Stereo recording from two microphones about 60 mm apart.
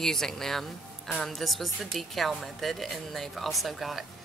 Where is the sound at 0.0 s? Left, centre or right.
Centre.